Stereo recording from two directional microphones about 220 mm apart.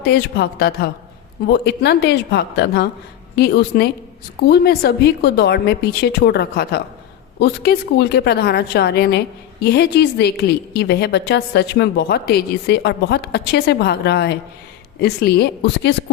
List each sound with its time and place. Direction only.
0.0 s a woman's voice: 45° left (ahead or behind)